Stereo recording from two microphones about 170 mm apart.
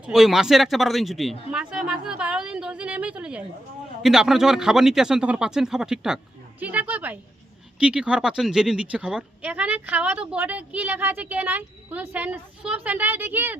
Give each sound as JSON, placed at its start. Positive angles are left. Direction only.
{"t": 0.0, "sound": "speech", "side_deg": 0}